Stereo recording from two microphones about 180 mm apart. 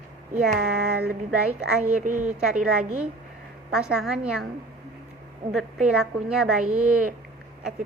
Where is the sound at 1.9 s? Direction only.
45° right (ahead or behind).